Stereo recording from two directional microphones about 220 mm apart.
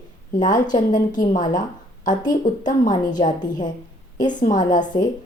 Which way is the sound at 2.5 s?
35° left (ahead or behind).